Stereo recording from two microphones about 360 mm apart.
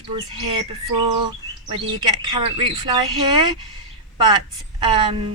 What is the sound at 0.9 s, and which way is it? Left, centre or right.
Bird, right.